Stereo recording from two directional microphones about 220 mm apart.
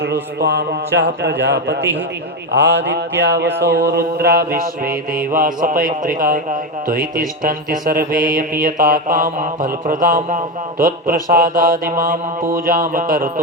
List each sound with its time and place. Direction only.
0.0 s speech: 50° right (ahead or behind)
3.6 s mantra: 50° right (ahead or behind)